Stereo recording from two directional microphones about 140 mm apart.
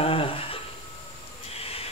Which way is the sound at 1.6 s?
45° left (ahead or behind).